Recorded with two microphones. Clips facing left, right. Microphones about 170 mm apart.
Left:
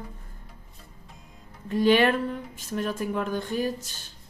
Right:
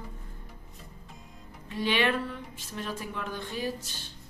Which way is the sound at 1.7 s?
45° left (ahead or behind).